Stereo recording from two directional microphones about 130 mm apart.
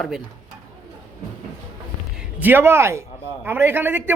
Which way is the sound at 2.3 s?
15° right (ahead or behind).